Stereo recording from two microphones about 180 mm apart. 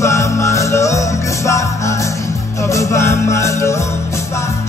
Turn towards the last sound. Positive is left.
turn(degrees=15)  # may be behind; listen again after turning